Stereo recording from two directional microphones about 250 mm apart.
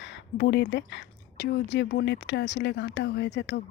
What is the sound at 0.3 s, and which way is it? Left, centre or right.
Speech, left.